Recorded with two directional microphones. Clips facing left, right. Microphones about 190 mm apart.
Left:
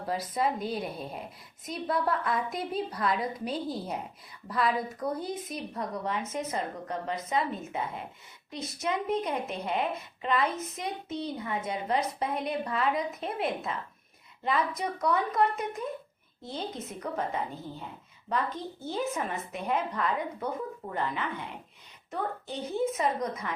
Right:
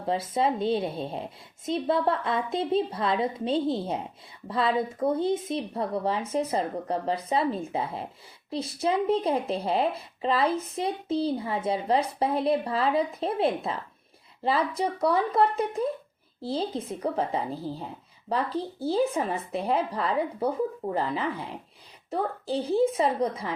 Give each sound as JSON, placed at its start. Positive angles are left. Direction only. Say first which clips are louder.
{"t": 0.0, "sound": "a woman's voice", "louder": "right 4 dB", "side_deg": -25}